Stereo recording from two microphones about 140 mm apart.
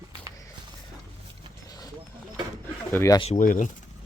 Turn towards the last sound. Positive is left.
turn(degrees=70)  # may be behind; listen again after turning